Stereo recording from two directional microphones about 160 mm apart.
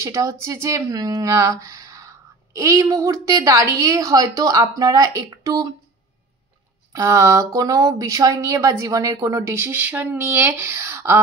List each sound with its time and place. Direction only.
0.0 s speech: 20° right (ahead or behind)
6.9 s speech: 20° right (ahead or behind)